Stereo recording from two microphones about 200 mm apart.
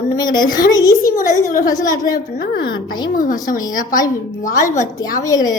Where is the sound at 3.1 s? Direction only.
45° left (ahead or behind).